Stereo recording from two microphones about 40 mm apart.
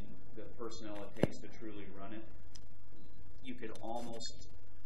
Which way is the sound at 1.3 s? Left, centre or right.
Centre.